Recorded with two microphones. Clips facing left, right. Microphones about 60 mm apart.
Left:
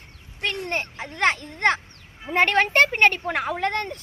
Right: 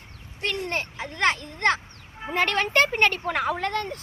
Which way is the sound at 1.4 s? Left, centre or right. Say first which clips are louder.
Left 2 dB; left.